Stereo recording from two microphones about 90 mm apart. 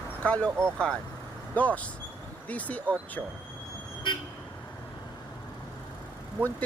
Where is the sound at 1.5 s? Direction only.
15° left (ahead or behind).